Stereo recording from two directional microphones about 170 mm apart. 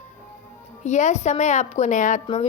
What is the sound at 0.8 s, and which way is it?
A woman's voice, 45° left (ahead or behind).